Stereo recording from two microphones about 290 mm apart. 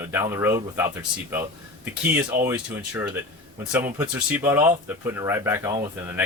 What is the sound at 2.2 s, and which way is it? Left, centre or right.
Speech, centre.